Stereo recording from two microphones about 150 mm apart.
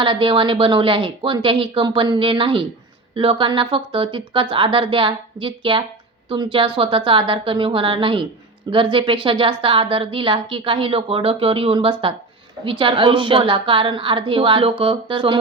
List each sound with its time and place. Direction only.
0.0 s a woman's voice: 35° right (ahead or behind)